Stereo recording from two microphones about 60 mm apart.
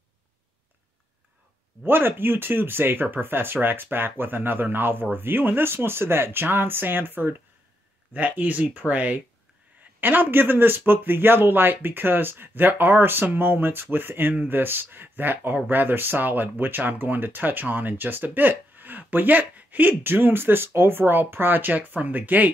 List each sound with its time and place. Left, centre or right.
1.9 s speech: right